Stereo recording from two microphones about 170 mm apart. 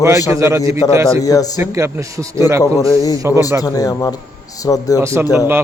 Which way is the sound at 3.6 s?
20° left (ahead or behind).